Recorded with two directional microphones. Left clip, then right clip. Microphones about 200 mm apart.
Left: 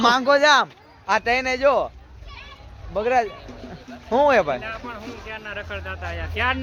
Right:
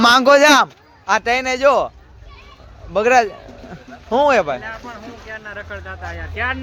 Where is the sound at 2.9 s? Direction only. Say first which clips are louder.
Right 7 dB; 25° right (ahead or behind).